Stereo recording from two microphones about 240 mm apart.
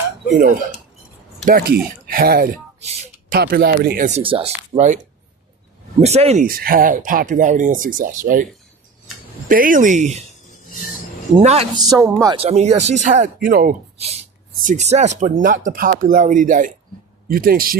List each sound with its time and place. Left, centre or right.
1.5 s speech: right
6.0 s speech: right
9.5 s speech: right
11.4 s speech: right